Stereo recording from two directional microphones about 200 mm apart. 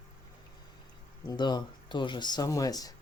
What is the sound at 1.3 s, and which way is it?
Speech, 20° left (ahead or behind).